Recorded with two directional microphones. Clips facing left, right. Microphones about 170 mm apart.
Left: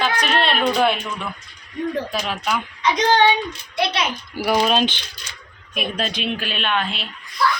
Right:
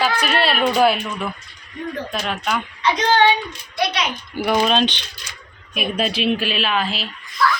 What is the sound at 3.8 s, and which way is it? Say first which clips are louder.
Speech: even; 30° left (ahead or behind).